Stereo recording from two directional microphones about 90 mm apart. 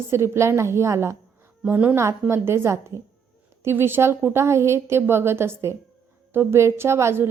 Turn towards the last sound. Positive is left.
turn(degrees=-30)  # may be behind; listen again after turning